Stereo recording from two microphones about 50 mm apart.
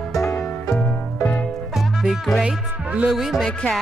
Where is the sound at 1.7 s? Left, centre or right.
Centre.